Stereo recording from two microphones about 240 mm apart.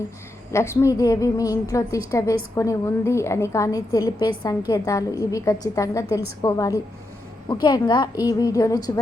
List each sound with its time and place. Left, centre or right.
0.5 s a woman's voice: centre